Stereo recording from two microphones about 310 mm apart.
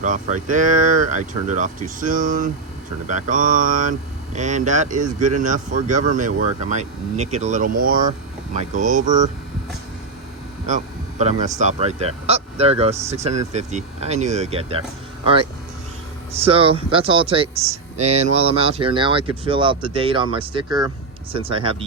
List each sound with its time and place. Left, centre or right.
0.0 s speech: right
11.2 s speech: right
16.4 s speech: centre